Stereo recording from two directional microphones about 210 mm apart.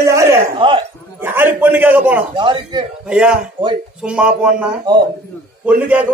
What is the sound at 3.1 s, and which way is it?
A man's voice, 5° right (ahead or behind).